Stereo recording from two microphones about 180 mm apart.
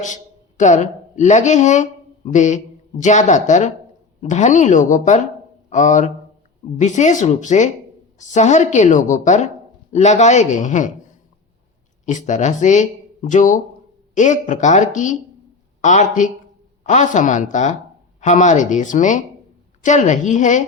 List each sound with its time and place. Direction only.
0.0 s a man's voice: 45° left (ahead or behind)
12.0 s speech: 45° left (ahead or behind)